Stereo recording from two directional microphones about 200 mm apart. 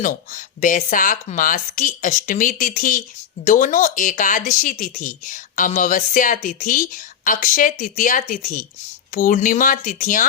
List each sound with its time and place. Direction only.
0.0 s speech: 40° left (ahead or behind)